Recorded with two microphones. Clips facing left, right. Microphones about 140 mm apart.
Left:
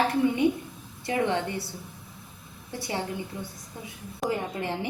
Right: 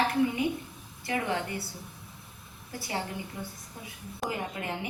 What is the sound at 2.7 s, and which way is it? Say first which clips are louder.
Speech: left 4 dB; 25° left (ahead or behind).